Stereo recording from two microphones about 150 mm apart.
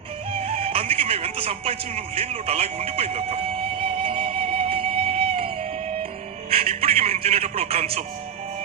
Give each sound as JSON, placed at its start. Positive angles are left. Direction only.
{"t": 0.3, "sound": "music", "side_deg": -45}
{"t": 6.5, "sound": "music", "side_deg": -40}